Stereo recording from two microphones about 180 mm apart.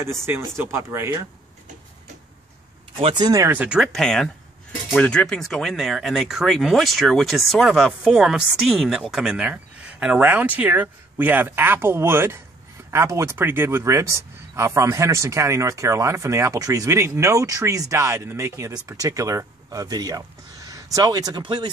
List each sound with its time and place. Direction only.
0.2 s speech: 15° right (ahead or behind)
3.0 s speech: 25° right (ahead or behind)